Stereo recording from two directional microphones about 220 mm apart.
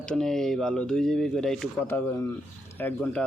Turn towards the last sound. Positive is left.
turn(degrees=5)  # may be behind; listen again after turning